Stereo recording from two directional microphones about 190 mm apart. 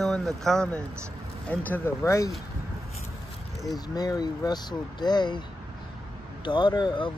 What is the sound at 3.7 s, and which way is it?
Speech, 20° left (ahead or behind).